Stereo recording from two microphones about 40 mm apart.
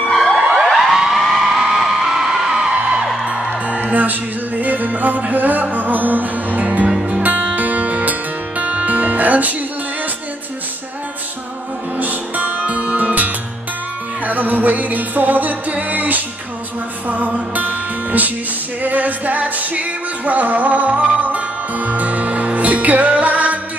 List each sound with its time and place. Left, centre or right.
0.7 s a sound: centre
1.7 s music: centre
3.8 s music: right
12.0 s music: right
17.6 s music: right